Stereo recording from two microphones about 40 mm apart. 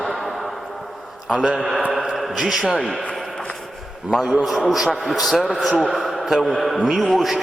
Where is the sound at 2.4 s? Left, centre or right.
Centre.